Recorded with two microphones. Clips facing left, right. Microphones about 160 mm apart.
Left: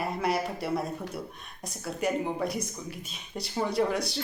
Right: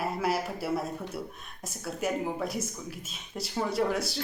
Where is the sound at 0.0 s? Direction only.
Centre (ahead or behind).